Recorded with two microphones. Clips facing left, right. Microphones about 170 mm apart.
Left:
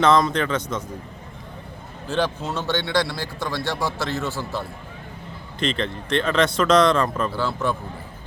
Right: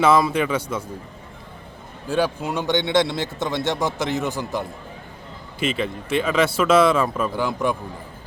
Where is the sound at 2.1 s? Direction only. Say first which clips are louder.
Right 2 dB; 10° right (ahead or behind).